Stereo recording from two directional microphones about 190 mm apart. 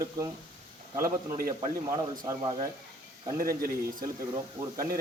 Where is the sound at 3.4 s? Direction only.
50° right (ahead or behind).